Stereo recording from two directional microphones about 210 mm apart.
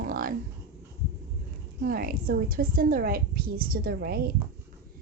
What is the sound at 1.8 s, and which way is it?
A woman's voice, 45° right (ahead or behind).